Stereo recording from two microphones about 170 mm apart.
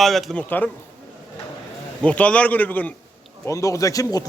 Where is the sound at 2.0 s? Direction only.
5° left (ahead or behind).